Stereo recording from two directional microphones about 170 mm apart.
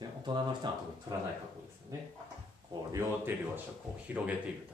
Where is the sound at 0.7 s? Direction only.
25° right (ahead or behind).